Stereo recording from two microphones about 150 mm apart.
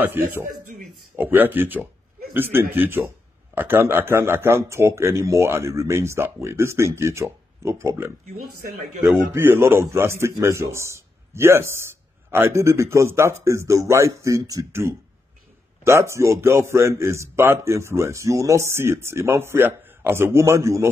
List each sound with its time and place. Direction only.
0.1 s a man's voice: 15° right (ahead or behind)